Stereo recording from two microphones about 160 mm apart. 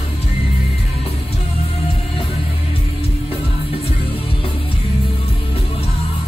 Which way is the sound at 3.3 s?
35° left (ahead or behind).